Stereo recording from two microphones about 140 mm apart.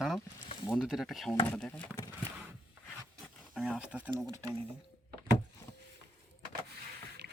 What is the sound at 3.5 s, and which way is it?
Speech, 5° right (ahead or behind).